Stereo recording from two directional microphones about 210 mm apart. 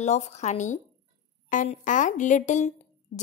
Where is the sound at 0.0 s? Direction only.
30° left (ahead or behind).